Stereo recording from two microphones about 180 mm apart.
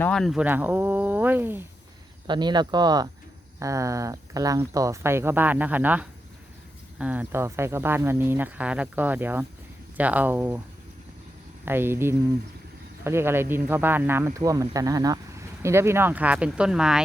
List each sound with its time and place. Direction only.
0.0 s speech: 5° left (ahead or behind)
2.2 s speech: 25° right (ahead or behind)
11.6 s speech: 10° right (ahead or behind)